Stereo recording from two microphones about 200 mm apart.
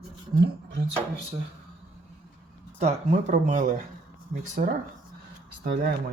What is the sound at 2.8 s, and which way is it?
Speech, 35° right (ahead or behind).